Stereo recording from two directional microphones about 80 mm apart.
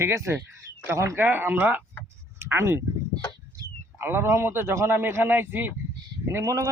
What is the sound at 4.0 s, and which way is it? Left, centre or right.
A man's voice, right.